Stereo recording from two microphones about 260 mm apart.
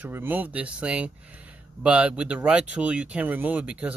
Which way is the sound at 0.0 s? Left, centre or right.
Centre.